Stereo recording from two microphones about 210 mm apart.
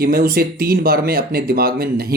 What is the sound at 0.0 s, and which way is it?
Speech, 45° right (ahead or behind).